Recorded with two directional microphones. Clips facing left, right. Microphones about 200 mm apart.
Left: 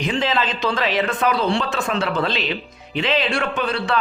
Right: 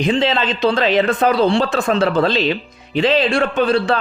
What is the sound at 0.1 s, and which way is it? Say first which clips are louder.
A man's voice: right 3 dB; 25° right (ahead or behind).